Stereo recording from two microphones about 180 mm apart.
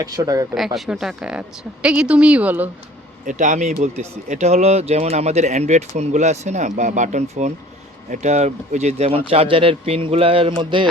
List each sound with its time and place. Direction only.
0.0 s speech: 20° right (ahead or behind)
0.5 s a woman's voice: centre (ahead or behind)
3.2 s speech: 45° right (ahead or behind); by 10.8 s 25° right (ahead or behind)